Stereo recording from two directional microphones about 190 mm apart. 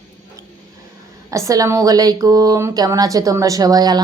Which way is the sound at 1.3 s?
15° right (ahead or behind).